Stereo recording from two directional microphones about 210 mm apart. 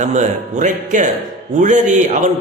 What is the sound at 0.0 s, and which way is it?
A man's voice, 35° right (ahead or behind).